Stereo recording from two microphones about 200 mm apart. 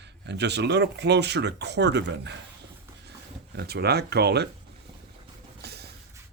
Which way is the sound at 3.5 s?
55° right (ahead or behind).